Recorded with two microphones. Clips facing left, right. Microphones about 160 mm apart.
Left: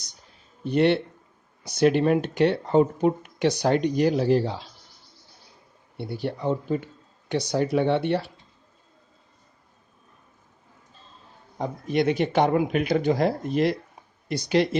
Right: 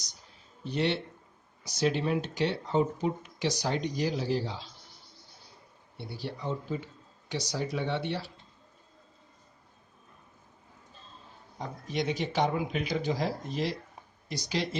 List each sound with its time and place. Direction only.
0.6 s speech: 60° left (ahead or behind)
6.0 s speech: 55° left (ahead or behind)
11.5 s speech: 60° left (ahead or behind)